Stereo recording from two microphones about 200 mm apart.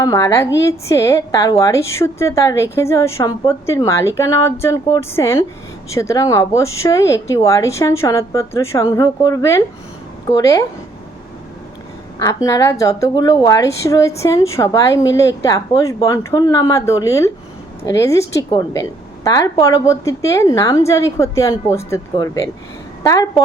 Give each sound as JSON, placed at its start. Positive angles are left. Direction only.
{"t": 0.0, "sound": "speech", "side_deg": 15}
{"t": 12.2, "sound": "speech", "side_deg": 15}